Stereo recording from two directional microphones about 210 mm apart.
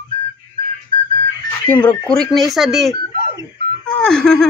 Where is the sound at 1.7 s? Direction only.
5° left (ahead or behind).